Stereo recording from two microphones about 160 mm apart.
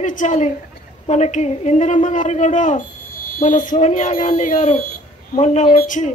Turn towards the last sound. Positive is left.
turn(degrees=50)  # may be behind; listen again after turning